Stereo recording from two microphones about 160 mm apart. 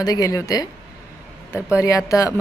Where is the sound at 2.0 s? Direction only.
20° left (ahead or behind).